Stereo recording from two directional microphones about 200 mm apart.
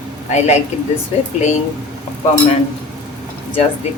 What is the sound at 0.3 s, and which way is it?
Speech, 35° left (ahead or behind).